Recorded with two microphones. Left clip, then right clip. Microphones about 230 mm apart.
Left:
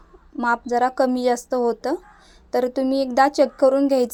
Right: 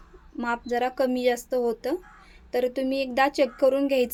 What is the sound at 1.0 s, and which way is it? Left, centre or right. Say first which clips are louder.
A woman's voice: left 4 dB; centre.